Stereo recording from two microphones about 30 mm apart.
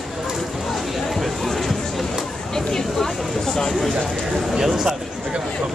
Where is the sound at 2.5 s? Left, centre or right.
Centre.